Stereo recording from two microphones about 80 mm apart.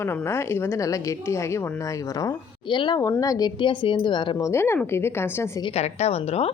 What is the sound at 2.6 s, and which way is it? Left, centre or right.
Speech, left.